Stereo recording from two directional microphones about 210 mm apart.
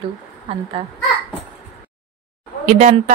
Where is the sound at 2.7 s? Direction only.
35° right (ahead or behind).